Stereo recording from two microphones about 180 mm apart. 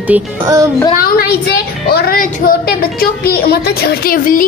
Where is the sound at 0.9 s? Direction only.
55° left (ahead or behind).